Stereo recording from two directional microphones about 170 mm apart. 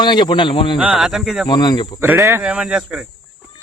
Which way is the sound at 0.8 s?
5° right (ahead or behind).